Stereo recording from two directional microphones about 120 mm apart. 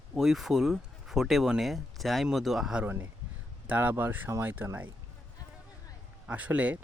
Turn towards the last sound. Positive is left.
turn(degrees=-10)  # may be behind; listen again after turning